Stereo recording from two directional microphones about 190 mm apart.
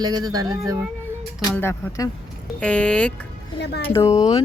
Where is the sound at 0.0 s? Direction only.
20° right (ahead or behind).